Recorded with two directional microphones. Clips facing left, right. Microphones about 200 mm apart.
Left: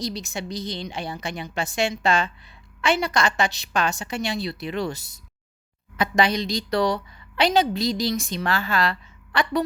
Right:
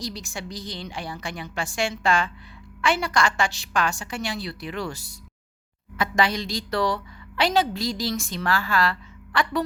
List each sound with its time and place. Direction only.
0.0 s a woman's voice: 20° left (ahead or behind)